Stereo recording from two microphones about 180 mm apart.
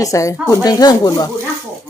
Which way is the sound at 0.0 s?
20° left (ahead or behind).